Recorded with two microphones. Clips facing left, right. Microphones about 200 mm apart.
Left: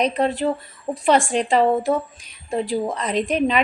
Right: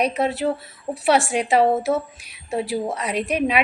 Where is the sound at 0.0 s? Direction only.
10° right (ahead or behind).